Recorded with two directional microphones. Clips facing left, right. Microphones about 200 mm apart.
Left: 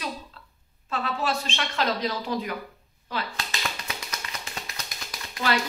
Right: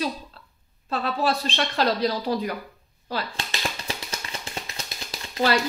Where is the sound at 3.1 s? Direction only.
30° right (ahead or behind).